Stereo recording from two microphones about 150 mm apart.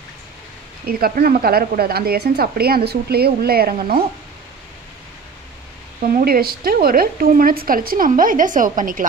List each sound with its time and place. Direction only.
0.8 s a woman's voice: 85° right
6.0 s speech: 85° right; by 9.0 s 65° right (ahead or behind)